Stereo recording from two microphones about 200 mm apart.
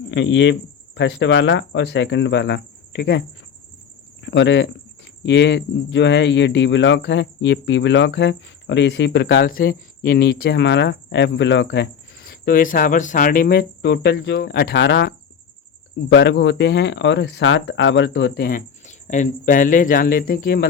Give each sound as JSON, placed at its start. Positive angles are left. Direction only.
{"t": 0.1, "sound": "speech", "side_deg": 65}
{"t": 18.4, "sound": "speech", "side_deg": 40}